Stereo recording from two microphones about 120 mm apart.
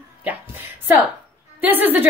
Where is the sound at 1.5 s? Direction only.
15° right (ahead or behind).